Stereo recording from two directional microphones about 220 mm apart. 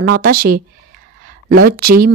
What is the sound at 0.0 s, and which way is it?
Speech, 40° right (ahead or behind).